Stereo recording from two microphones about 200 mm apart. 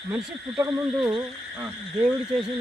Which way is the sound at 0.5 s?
20° right (ahead or behind).